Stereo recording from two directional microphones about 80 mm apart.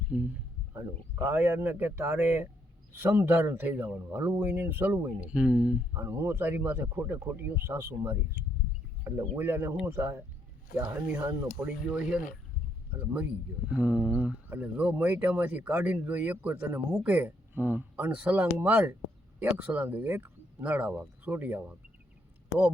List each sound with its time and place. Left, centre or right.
0.1 s speech: centre
0.7 s speech: right
5.2 s speech: centre
5.9 s speech: right
9.4 s speech: right
10.8 s speech: right